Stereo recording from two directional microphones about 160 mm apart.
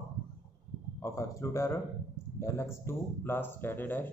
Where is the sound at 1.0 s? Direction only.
20° left (ahead or behind).